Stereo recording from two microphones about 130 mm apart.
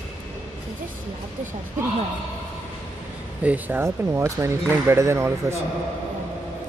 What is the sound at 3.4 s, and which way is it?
Speech, 10° right (ahead or behind).